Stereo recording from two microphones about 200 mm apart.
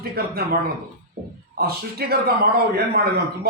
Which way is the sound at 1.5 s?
50° right (ahead or behind).